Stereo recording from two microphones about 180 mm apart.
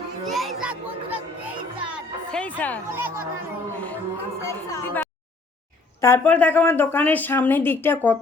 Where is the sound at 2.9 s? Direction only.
10° right (ahead or behind).